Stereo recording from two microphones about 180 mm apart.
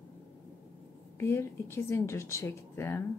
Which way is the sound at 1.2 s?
15° left (ahead or behind).